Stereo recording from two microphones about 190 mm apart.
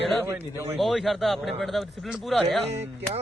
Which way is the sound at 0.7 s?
Centre (ahead or behind).